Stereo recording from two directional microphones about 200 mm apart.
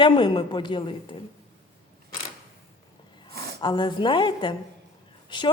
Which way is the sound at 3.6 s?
25° left (ahead or behind).